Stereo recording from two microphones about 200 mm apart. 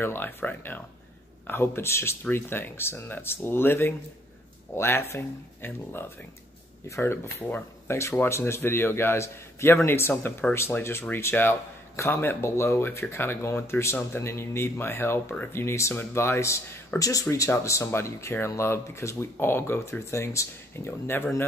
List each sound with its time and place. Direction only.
0.0 s speech: 10° left (ahead or behind)